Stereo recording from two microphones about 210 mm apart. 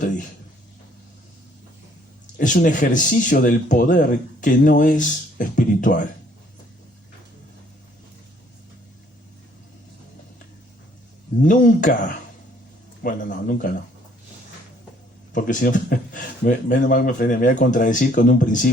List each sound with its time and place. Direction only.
2.2 s speech: 40° left (ahead or behind)
11.4 s speech: 40° left (ahead or behind)
13.0 s speech: 40° left (ahead or behind)
15.3 s speech: 40° left (ahead or behind)